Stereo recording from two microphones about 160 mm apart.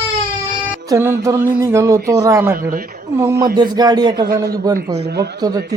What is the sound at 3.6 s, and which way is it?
Speech, 25° right (ahead or behind).